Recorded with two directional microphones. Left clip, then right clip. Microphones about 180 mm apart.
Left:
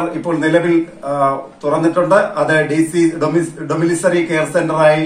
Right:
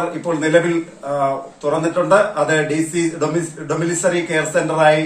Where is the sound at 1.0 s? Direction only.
15° right (ahead or behind).